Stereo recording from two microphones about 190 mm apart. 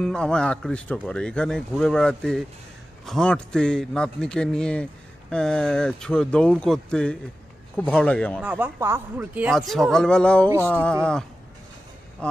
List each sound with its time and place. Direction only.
0.0 s a man's voice: 5° left (ahead or behind)
8.4 s a man's voice: 10° right (ahead or behind)